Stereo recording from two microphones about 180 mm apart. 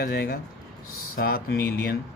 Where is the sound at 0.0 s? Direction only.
60° left (ahead or behind).